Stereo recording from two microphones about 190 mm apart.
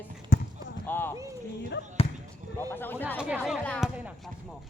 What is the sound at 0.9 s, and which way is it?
Speech, 10° left (ahead or behind).